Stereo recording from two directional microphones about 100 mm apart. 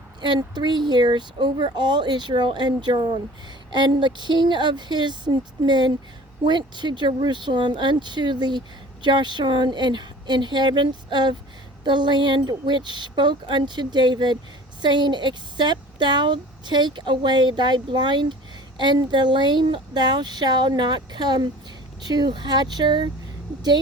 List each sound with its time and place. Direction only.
0.2 s speech: 50° right (ahead or behind)